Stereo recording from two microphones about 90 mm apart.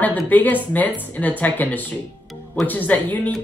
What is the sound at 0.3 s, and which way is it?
Speech, 20° left (ahead or behind).